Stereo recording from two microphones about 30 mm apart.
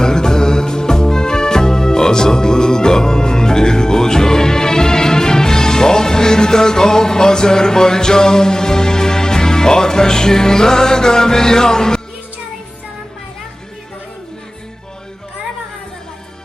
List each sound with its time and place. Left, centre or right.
0.0 s music: left